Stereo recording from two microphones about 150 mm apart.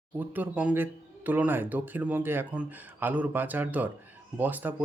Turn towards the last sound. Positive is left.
turn(degrees=-10)  # may be behind; listen again after turning